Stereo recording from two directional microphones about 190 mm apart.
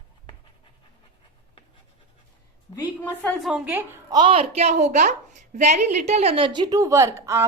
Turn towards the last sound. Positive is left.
turn(degrees=-15)  # may be behind; listen again after turning